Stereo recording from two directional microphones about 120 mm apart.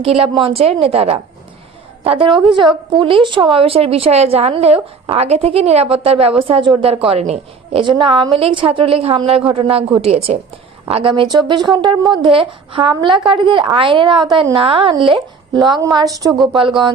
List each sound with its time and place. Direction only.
0.0 s a woman's voice: 55° right (ahead or behind)
6.5 s a woman's voice: 40° right (ahead or behind)
15.5 s speech: 35° right (ahead or behind)
16.6 s a woman's voice: 45° right (ahead or behind)